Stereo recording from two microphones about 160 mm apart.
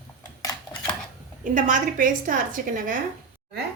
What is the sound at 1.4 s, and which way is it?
A woman's voice, 55° right (ahead or behind).